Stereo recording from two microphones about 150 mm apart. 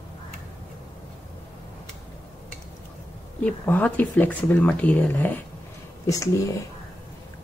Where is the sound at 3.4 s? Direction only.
10° left (ahead or behind).